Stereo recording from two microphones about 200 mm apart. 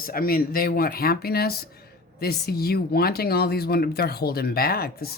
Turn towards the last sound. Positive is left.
turn(degrees=50)  # may be behind; listen again after turning